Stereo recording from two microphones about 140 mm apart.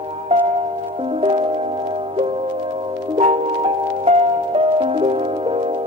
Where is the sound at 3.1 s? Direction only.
45° right (ahead or behind).